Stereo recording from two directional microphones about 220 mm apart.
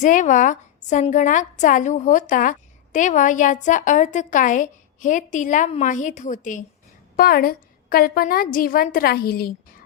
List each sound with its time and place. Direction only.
0.0 s a woman's voice: 35° left (ahead or behind)